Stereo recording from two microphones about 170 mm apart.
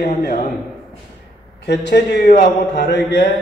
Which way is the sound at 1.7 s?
85° left.